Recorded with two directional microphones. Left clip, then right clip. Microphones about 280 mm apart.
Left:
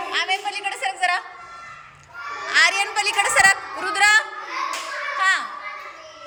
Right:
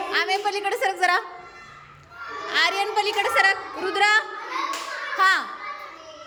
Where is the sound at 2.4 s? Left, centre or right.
Centre.